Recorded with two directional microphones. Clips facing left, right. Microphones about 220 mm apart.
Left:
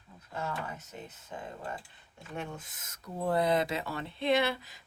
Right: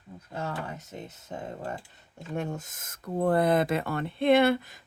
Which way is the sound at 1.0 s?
40° right (ahead or behind).